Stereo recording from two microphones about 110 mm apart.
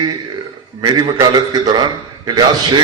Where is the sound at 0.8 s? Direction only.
40° right (ahead or behind).